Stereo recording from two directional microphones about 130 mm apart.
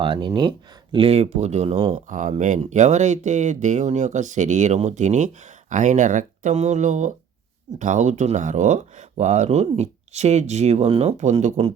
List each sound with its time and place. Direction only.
0.0 s speech: 40° right (ahead or behind)
0.9 s speech: 50° right (ahead or behind)
1.9 s speech: 75° right (ahead or behind); by 11.7 s 55° right (ahead or behind)